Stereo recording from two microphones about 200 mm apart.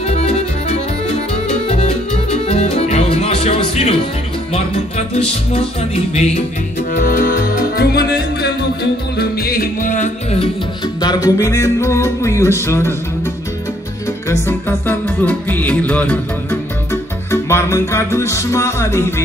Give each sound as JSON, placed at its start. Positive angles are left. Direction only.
{"t": 0.0, "sound": "music", "side_deg": 30}
{"t": 6.9, "sound": "music", "side_deg": 45}
{"t": 11.0, "sound": "music", "side_deg": 20}
{"t": 14.3, "sound": "music", "side_deg": 15}